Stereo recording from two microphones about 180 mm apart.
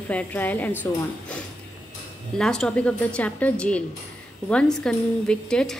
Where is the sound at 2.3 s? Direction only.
5° left (ahead or behind).